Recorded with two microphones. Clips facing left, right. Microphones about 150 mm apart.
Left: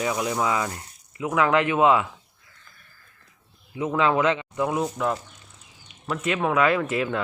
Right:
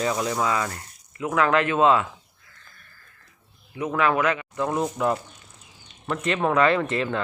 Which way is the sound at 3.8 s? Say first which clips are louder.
Left 1 dB; 20° left (ahead or behind).